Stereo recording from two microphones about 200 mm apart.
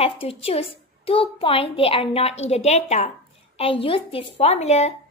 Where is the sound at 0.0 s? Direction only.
30° left (ahead or behind).